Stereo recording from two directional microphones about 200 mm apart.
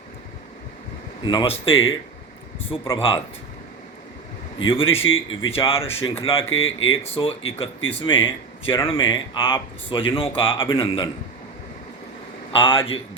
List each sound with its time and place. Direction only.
1.2 s speech: 25° left (ahead or behind)
1.7 s speech: 75° left (ahead or behind)
2.9 s speech: 25° left (ahead or behind)
4.7 s speech: 30° left (ahead or behind)
5.0 s speech: 75° left (ahead or behind)
5.5 s speech: 30° left (ahead or behind)
6.5 s speech: 75° left (ahead or behind)
7.1 s speech: 25° left (ahead or behind)
12.5 s speech: 25° left (ahead or behind)